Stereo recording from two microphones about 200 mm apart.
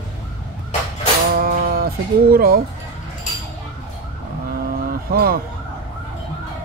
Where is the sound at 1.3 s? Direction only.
50° right (ahead or behind).